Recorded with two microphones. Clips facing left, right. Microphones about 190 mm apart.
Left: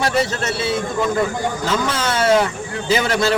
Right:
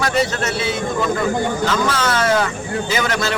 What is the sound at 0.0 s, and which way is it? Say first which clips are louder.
Speech: even; 30° left (ahead or behind).